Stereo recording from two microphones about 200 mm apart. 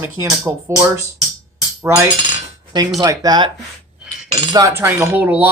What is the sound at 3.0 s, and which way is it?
Speech, 20° right (ahead or behind).